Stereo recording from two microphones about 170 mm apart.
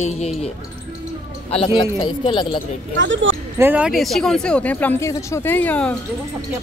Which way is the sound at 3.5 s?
10° right (ahead or behind).